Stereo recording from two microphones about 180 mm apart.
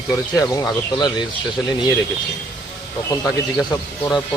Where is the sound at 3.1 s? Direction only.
15° left (ahead or behind).